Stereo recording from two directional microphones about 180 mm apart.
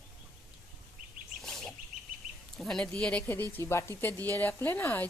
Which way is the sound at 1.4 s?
Centre (ahead or behind).